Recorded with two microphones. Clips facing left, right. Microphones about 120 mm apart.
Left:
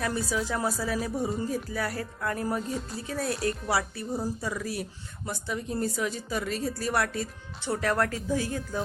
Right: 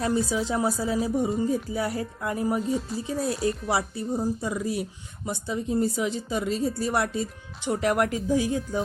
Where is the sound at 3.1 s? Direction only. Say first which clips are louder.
Right 3 dB; 20° right (ahead or behind).